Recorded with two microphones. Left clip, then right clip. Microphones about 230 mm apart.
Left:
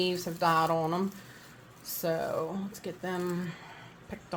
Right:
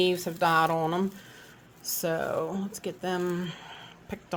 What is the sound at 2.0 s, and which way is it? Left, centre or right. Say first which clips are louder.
Speech: right 2 dB; right.